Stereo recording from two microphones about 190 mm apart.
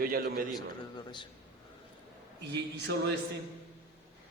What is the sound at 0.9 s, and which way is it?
Speech, 25° left (ahead or behind).